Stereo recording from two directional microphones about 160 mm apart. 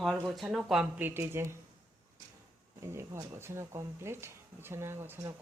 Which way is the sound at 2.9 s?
15° right (ahead or behind).